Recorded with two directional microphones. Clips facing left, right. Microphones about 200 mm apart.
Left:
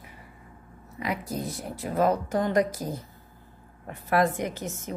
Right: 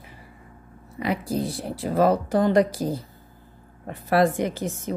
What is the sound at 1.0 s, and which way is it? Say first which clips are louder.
Speech: right 6 dB; 30° right (ahead or behind).